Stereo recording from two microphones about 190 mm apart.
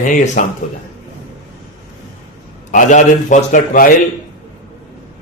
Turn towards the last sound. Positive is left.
turn(degrees=45)  # may be behind; listen again after turning